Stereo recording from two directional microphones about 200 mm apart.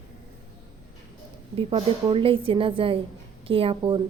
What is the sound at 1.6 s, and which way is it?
A woman's voice, 25° right (ahead or behind).